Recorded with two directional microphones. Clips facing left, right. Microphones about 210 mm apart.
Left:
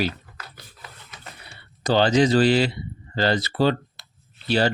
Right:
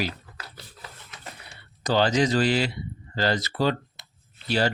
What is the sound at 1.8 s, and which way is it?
Speech, 30° left (ahead or behind).